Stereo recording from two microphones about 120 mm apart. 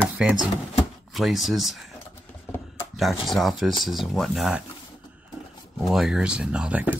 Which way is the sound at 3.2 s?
Centre (ahead or behind).